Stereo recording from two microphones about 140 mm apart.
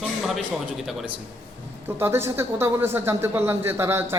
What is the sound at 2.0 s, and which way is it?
A man's voice, 15° right (ahead or behind).